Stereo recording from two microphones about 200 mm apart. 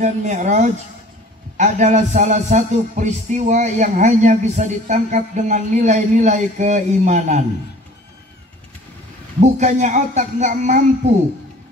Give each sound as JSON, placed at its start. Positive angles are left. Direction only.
{"t": 0.0, "sound": "music", "side_deg": -35}
{"t": 9.4, "sound": "music", "side_deg": -35}